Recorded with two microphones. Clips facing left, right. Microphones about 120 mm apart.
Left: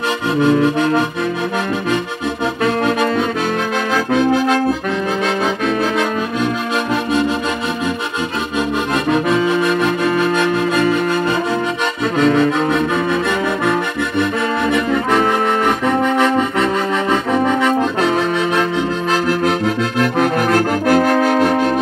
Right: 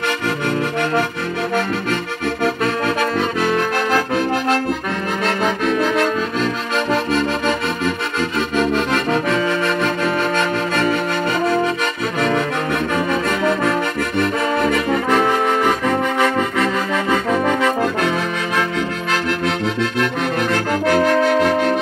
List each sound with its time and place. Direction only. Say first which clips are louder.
0.4 s accordion: left 7 dB; 20° left (ahead or behind)
2.4 s accordion: left 3 dB; 15° left (ahead or behind)
7.1 s accordion: left 2 dB; 15° left (ahead or behind)
8.5 s accordion: even; 15° left (ahead or behind)
20.0 s trombone: left 7 dB; 45° left (ahead or behind)